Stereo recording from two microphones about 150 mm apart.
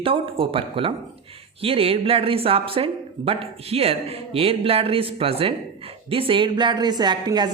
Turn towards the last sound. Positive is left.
turn(degrees=-30)  # may be behind; listen again after turning